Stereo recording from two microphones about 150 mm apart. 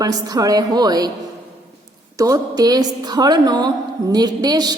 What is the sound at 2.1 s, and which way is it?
A woman's voice, 25° right (ahead or behind).